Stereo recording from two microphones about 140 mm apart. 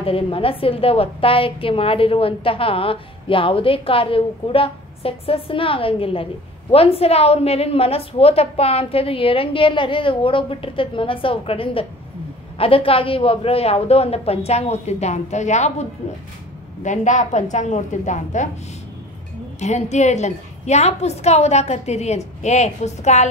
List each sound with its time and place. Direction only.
0.0 s a woman's voice: 40° left (ahead or behind); by 18.5 s 60° left (ahead or behind)
19.6 s a woman's voice: 55° left (ahead or behind)